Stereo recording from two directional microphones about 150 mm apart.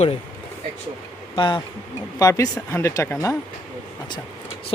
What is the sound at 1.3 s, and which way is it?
Speech, 35° left (ahead or behind).